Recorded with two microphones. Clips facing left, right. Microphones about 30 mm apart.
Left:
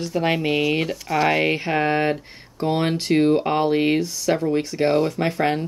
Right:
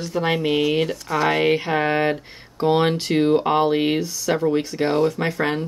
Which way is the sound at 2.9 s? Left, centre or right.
Centre.